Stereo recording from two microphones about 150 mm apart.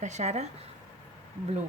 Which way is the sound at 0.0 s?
50° right (ahead or behind).